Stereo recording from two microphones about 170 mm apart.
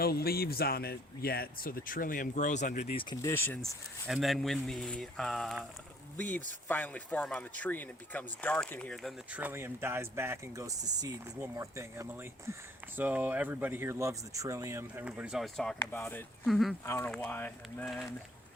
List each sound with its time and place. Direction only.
0.0 s speech: 65° left (ahead or behind); by 3.2 s 30° left (ahead or behind)
3.2 s speech: 15° left (ahead or behind)
16.5 s speech: centre (ahead or behind)
16.8 s speech: 15° left (ahead or behind)